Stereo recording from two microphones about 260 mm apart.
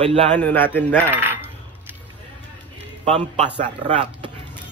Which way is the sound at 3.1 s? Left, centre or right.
Centre.